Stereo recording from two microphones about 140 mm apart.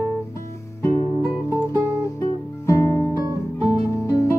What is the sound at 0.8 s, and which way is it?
Music, 20° left (ahead or behind).